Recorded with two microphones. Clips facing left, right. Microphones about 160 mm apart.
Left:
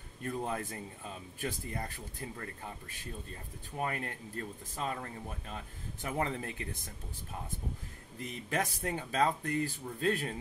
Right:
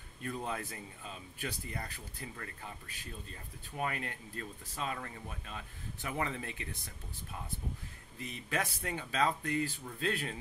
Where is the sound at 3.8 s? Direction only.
35° left (ahead or behind).